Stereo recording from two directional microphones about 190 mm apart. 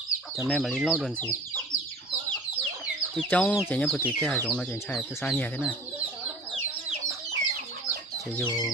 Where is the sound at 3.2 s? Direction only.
5° left (ahead or behind).